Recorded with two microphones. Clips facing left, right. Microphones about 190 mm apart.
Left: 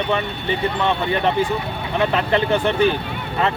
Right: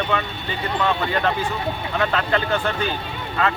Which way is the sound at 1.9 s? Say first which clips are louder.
Left 4 dB; 20° left (ahead or behind).